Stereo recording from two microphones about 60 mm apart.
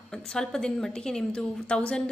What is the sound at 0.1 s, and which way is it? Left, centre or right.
A woman's voice, centre.